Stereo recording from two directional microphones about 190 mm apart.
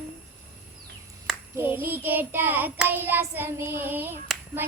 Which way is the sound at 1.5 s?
10° right (ahead or behind).